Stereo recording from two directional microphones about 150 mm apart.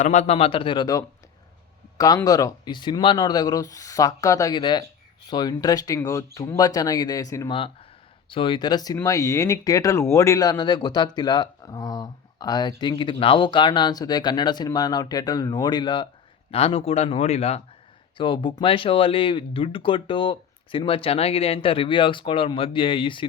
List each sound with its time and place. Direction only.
0.0 s speech: 55° left (ahead or behind); by 7.5 s 20° left (ahead or behind)
7.5 s speech: 35° left (ahead or behind)
18.2 s speech: 35° left (ahead or behind)